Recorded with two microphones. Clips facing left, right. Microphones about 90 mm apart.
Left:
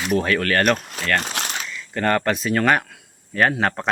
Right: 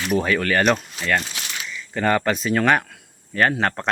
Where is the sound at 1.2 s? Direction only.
60° left (ahead or behind).